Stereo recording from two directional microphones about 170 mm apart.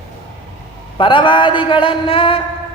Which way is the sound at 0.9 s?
30° left (ahead or behind).